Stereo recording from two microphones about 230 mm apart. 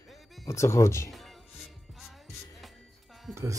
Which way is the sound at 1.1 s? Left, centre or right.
Centre.